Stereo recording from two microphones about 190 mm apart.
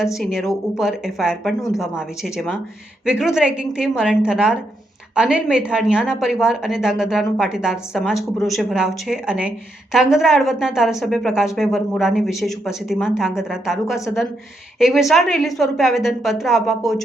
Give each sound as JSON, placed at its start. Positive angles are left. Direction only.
{"t": 0.0, "sound": "a woman's voice", "side_deg": 0}
{"t": 1.5, "sound": "speech", "side_deg": 15}
{"t": 2.0, "sound": "a woman's voice", "side_deg": 0}